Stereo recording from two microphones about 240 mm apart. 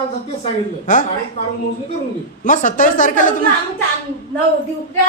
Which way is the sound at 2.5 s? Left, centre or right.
Left.